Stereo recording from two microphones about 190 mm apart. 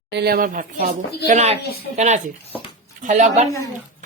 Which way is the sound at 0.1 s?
60° right (ahead or behind).